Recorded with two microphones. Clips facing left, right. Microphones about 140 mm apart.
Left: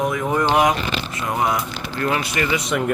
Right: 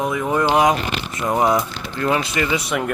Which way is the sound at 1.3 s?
30° right (ahead or behind).